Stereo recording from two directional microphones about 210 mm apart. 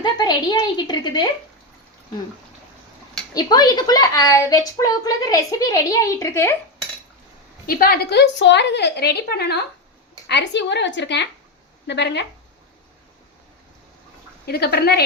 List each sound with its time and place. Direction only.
0.0 s speech: 20° left (ahead or behind)
3.3 s a woman's voice: 20° left (ahead or behind)
7.7 s a woman's voice: 45° left (ahead or behind)
14.4 s a woman's voice: 50° left (ahead or behind)